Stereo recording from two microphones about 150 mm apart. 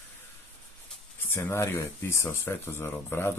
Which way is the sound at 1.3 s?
15° left (ahead or behind).